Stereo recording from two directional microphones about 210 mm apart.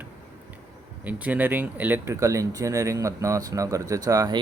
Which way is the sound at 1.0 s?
5° right (ahead or behind).